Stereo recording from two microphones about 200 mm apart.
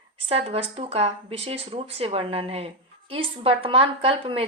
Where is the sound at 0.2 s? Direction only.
30° right (ahead or behind).